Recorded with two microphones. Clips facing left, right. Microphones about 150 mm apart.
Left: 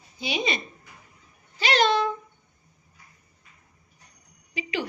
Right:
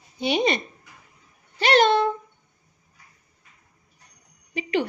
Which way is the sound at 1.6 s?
55° right (ahead or behind).